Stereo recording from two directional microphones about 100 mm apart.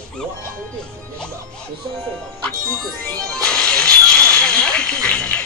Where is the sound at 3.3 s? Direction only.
10° left (ahead or behind).